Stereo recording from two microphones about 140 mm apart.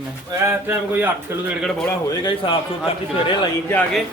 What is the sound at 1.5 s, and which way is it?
Speech, centre (ahead or behind).